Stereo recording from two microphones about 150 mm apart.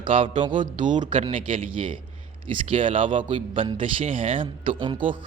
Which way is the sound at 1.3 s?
35° right (ahead or behind).